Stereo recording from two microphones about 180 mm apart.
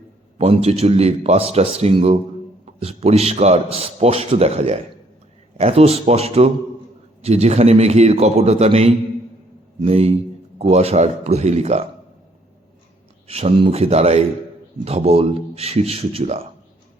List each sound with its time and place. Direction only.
0.3 s a man's voice: 35° right (ahead or behind)
13.2 s a man's voice: 35° right (ahead or behind)